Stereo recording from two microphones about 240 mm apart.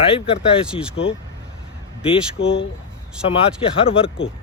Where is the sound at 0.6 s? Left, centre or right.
Centre.